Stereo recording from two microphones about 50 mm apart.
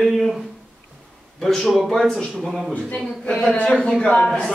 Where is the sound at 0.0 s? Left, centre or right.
Centre.